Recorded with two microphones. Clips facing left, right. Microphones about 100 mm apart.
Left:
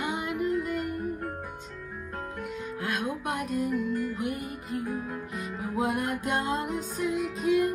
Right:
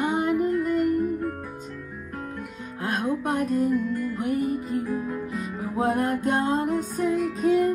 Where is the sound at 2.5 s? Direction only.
35° right (ahead or behind).